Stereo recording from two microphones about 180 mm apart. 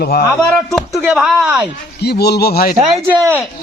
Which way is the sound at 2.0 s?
65° left (ahead or behind).